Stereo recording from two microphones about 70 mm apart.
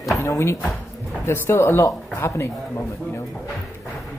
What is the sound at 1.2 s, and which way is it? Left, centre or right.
Speech, left.